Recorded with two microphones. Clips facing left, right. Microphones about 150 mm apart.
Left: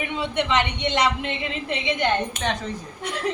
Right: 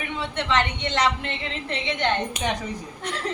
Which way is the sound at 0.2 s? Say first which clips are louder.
Left 1 dB; 15° left (ahead or behind).